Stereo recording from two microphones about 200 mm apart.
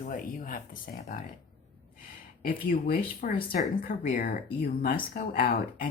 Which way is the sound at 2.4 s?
45° left (ahead or behind).